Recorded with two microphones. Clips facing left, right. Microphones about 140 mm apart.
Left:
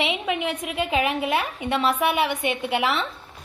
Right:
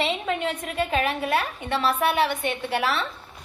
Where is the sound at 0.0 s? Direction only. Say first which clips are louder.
Even; 15° left (ahead or behind).